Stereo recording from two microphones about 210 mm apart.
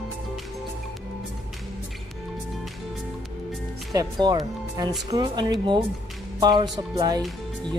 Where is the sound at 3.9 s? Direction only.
20° right (ahead or behind).